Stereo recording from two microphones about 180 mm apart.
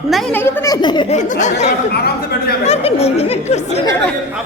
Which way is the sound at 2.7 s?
35° left (ahead or behind).